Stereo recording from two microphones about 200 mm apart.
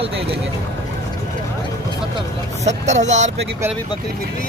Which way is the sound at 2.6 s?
35° right (ahead or behind).